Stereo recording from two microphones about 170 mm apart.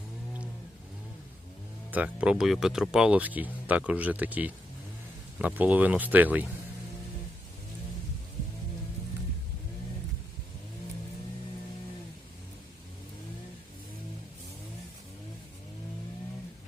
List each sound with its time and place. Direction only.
1.9 s speech: 10° right (ahead or behind)